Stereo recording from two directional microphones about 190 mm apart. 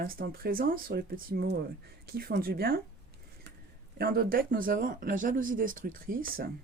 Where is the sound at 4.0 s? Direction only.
50° right (ahead or behind).